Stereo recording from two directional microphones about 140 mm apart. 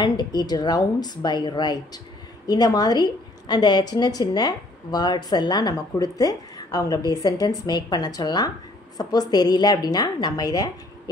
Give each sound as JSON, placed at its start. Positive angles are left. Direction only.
{"t": 0.0, "sound": "a woman's voice", "side_deg": 30}